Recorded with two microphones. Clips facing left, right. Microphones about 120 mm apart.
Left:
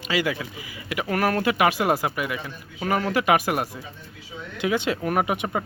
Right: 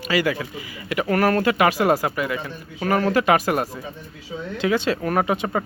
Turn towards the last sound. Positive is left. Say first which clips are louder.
# right 3 dB
turn(degrees=10)  # may be behind; listen again after turning